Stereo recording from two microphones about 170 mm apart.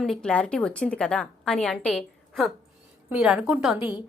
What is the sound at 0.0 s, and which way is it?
A woman's voice, 5° left (ahead or behind).